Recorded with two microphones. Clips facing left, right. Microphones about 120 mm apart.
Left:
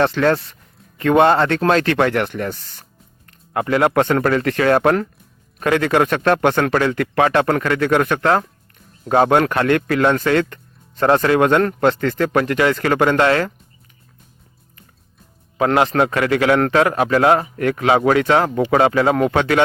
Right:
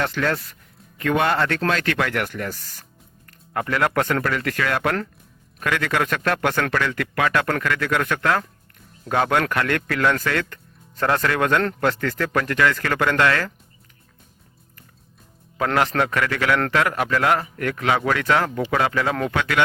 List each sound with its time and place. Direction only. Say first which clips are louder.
0.0 s speech: left 7 dB; 35° left (ahead or behind)
15.5 s speech: left 5 dB; 20° left (ahead or behind)